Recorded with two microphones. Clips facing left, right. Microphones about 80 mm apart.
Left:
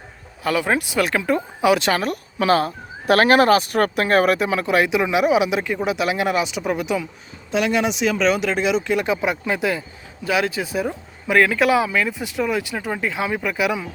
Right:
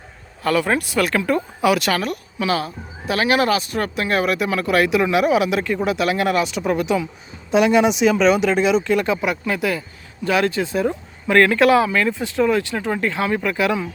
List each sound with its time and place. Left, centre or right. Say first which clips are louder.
0.4 s speech: right 1 dB; centre
2.4 s speech: left 4 dB; left
4.4 s speech: right 1 dB; left
7.5 s speech: right 5 dB; centre
9.2 s speech: even; left
10.2 s speech: right 2 dB; centre